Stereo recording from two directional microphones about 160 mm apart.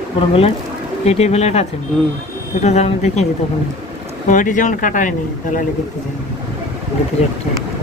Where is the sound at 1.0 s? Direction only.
40° left (ahead or behind).